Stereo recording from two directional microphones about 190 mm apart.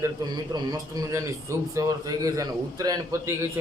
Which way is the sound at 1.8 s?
20° right (ahead or behind).